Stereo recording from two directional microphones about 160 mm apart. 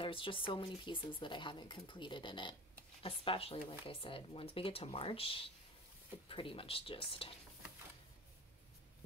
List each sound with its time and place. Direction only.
0.0 s speech: 35° left (ahead or behind)